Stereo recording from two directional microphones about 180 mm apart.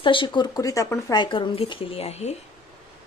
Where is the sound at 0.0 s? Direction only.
30° left (ahead or behind).